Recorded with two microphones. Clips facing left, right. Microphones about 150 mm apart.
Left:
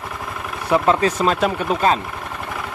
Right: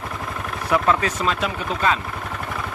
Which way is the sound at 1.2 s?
45° left (ahead or behind).